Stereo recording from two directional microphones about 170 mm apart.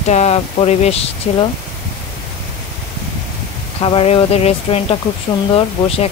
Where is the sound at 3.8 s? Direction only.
35° left (ahead or behind).